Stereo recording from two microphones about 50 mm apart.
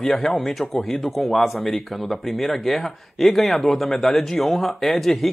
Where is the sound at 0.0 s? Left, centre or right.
Centre.